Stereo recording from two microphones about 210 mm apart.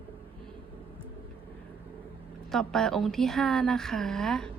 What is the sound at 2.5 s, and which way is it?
A woman's voice, centre (ahead or behind).